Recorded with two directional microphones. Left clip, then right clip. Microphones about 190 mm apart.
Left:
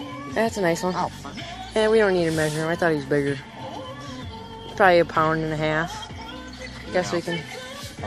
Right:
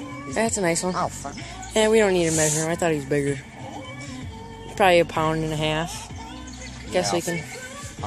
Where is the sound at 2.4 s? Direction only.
10° right (ahead or behind).